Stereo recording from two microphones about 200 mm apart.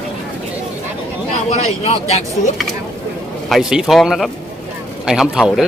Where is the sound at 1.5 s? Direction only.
30° left (ahead or behind).